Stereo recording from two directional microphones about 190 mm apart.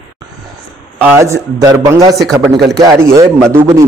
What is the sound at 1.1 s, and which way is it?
A man's voice, 15° right (ahead or behind).